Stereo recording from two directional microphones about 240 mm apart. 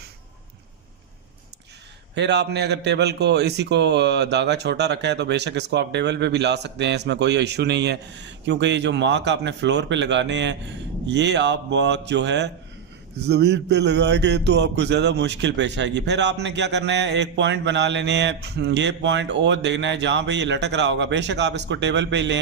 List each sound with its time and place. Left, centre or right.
2.1 s a man's voice: right